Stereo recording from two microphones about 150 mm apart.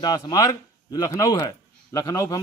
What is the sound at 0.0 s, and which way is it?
Speech, 25° left (ahead or behind).